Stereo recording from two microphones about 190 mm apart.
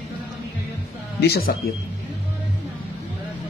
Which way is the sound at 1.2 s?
55° left (ahead or behind).